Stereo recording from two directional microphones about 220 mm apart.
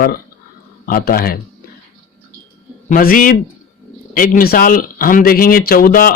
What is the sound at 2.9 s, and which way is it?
Speech, 40° left (ahead or behind).